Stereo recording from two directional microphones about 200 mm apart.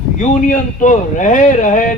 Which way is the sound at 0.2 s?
40° left (ahead or behind).